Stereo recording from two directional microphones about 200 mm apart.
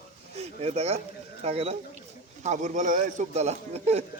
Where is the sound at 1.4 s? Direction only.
30° right (ahead or behind).